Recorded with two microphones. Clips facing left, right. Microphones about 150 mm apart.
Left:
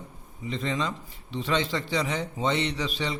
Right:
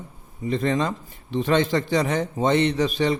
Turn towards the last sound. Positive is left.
turn(degrees=-50)  # may be behind; listen again after turning